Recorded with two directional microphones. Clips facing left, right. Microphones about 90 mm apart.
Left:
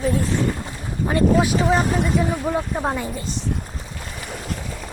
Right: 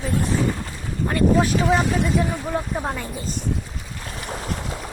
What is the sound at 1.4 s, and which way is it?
Speech, 5° left (ahead or behind).